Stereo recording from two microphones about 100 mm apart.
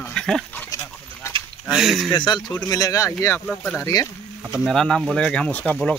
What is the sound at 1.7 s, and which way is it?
Speech, 5° right (ahead or behind).